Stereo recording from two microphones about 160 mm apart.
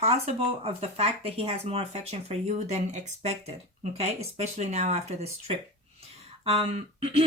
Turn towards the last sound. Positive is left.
turn(degrees=-40)  # may be behind; listen again after turning